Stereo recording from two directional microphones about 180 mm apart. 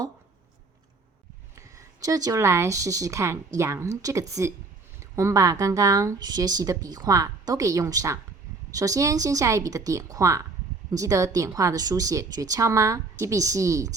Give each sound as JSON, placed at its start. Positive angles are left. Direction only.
{"t": 1.5, "sound": "speech", "side_deg": -20}